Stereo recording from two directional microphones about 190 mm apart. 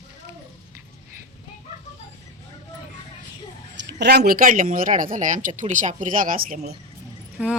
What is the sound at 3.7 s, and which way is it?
Speech, 65° right (ahead or behind).